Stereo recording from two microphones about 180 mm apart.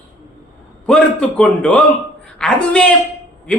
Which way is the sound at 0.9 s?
5° left (ahead or behind).